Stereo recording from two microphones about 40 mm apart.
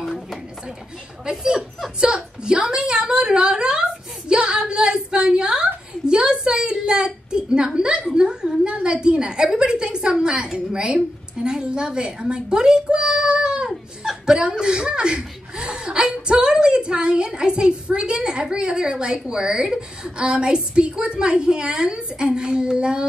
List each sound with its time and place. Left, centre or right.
1.2 s speech: centre
4.3 s a sound: right
10.2 s a woman's voice: right